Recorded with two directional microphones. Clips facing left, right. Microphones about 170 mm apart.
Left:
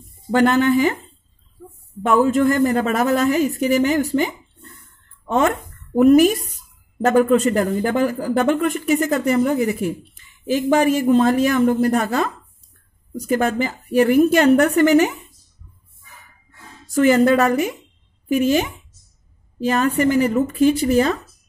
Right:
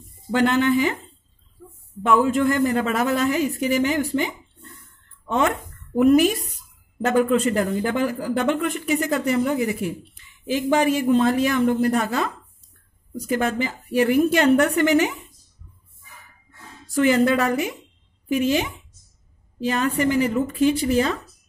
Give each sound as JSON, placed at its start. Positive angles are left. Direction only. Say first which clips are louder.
{"t": 0.3, "sound": "speech", "louder": "left 3 dB", "side_deg": 45}
{"t": 2.0, "sound": "speech", "louder": "left 3 dB", "side_deg": 45}
{"t": 5.2, "sound": "a sound", "louder": "left 3 dB", "side_deg": 45}
{"t": 5.9, "sound": "speech", "louder": "left 4 dB", "side_deg": 45}
{"t": 13.3, "sound": "speech", "louder": "left 3 dB", "side_deg": 45}
{"t": 16.9, "sound": "speech", "louder": "left 4 dB", "side_deg": 45}